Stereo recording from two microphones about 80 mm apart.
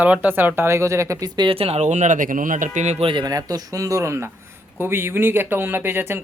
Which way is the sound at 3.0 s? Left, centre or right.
Right.